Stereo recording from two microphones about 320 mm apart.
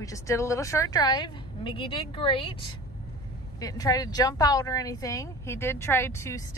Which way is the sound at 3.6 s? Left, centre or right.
Centre.